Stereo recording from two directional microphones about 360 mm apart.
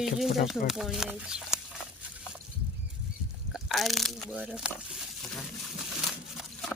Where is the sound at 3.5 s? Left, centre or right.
Centre.